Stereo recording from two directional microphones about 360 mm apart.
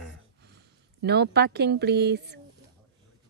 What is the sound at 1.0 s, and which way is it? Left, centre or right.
Speech, right.